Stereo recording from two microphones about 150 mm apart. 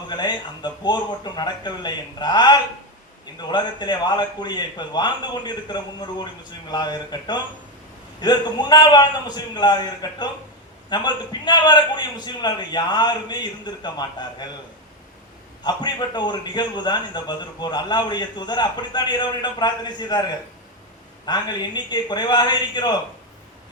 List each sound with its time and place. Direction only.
0.1 s a man's voice: 30° left (ahead or behind)
15.6 s a man's voice: 30° left (ahead or behind)